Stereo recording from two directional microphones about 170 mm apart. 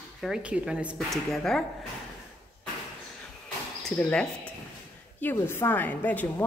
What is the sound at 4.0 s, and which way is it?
A woman's voice, 5° left (ahead or behind).